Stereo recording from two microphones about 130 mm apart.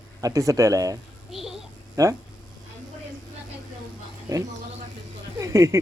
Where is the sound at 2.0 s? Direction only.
25° right (ahead or behind).